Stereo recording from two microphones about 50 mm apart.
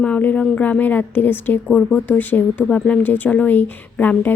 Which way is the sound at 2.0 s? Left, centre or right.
Left.